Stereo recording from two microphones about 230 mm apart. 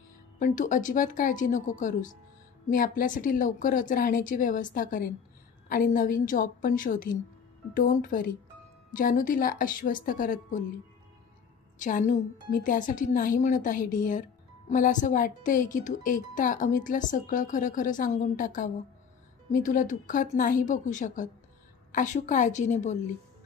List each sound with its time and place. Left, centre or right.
0.4 s speech: left
11.8 s speech: left